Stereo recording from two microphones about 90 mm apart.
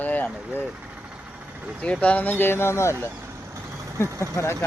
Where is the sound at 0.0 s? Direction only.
20° left (ahead or behind).